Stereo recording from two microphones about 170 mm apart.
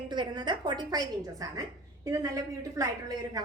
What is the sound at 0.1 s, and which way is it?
A woman's voice, 25° right (ahead or behind).